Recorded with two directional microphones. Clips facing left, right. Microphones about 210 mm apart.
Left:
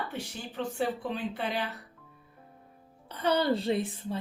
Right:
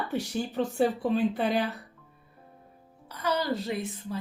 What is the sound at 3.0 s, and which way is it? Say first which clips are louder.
A woman's voice: left 2 dB; 30° left (ahead or behind).